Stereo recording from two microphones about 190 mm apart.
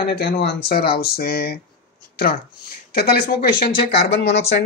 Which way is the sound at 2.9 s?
55° left (ahead or behind).